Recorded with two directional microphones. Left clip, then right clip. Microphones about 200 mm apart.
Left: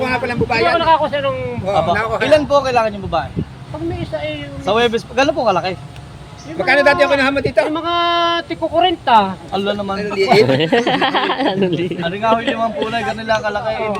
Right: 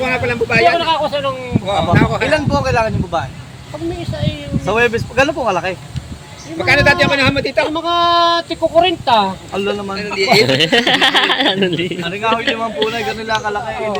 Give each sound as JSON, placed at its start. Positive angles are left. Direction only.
{"t": 0.0, "sound": "a man's voice", "side_deg": 55}
{"t": 0.9, "sound": "speech", "side_deg": -30}
{"t": 1.6, "sound": "speech", "side_deg": 50}
{"t": 4.6, "sound": "speech", "side_deg": 45}
{"t": 6.6, "sound": "a man's voice", "side_deg": 55}
{"t": 7.7, "sound": "speech", "side_deg": -15}
{"t": 9.6, "sound": "a man's voice", "side_deg": 55}
{"t": 10.3, "sound": "speech", "side_deg": 5}
{"t": 12.0, "sound": "a man's voice", "side_deg": 55}